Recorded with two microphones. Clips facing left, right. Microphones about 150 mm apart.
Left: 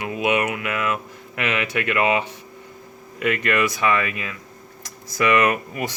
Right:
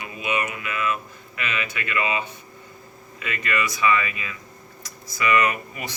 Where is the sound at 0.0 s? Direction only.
80° left.